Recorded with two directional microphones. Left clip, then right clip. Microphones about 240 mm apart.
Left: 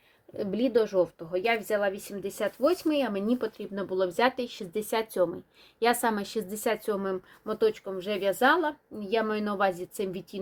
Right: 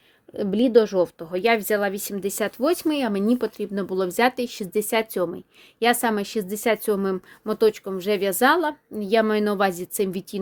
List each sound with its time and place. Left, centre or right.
0.3 s a woman's voice: right